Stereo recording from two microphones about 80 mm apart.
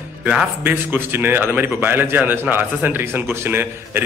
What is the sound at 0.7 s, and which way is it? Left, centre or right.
A man's voice, right.